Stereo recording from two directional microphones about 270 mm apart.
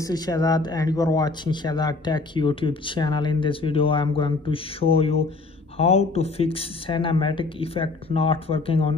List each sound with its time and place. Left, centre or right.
0.0 s speech: centre